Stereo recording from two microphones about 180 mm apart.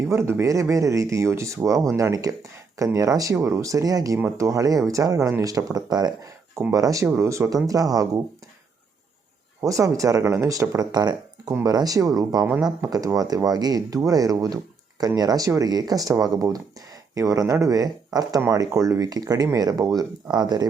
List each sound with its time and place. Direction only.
0.0 s speech: 15° right (ahead or behind)
9.6 s speech: 20° right (ahead or behind)